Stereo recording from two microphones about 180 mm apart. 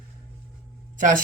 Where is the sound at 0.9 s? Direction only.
45° right (ahead or behind).